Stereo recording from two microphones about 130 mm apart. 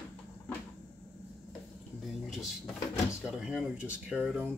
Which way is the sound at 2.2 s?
Centre (ahead or behind).